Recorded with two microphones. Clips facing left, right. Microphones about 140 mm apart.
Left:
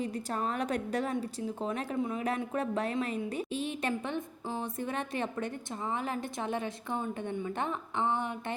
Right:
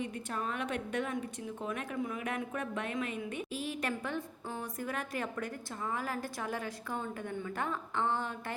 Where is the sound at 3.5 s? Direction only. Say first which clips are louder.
Left 2 dB; 25° left (ahead or behind).